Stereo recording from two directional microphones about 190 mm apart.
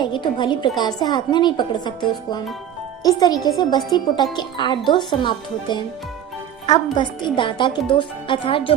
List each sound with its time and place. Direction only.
0.0 s speech: 25° left (ahead or behind)
6.9 s speech: 25° left (ahead or behind)